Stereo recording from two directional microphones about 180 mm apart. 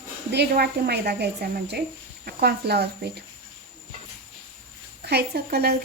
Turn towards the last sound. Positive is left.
turn(degrees=-60)  # may be behind; listen again after turning